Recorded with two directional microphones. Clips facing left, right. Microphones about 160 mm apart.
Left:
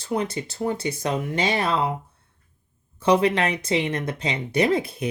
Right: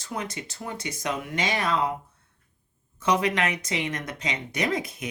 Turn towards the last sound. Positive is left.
turn(degrees=30)  # may be behind; listen again after turning